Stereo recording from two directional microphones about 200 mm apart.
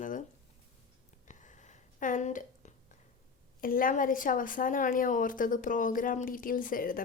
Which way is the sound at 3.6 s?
45° left (ahead or behind).